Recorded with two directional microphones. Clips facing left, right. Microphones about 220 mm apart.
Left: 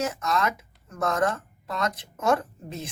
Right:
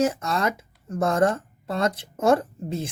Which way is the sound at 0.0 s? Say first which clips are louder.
Right 4 dB; 30° right (ahead or behind).